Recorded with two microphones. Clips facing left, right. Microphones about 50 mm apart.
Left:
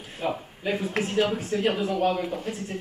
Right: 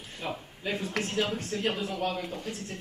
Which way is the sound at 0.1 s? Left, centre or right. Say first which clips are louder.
Left 7 dB; centre.